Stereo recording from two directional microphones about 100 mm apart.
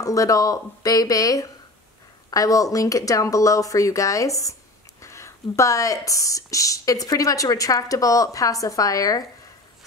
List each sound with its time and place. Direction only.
0.0 s speech: 35° left (ahead or behind)